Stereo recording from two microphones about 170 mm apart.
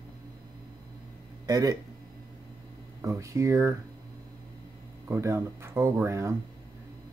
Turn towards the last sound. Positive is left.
turn(degrees=-15)  # may be behind; listen again after turning